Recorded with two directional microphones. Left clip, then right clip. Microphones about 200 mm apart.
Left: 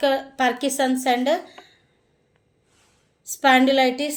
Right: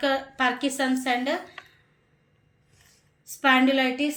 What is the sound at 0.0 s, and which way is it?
A woman's voice, 55° left (ahead or behind).